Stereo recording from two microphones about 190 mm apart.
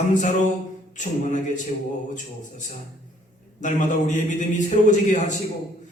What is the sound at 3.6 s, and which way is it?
A man's voice, 40° left (ahead or behind).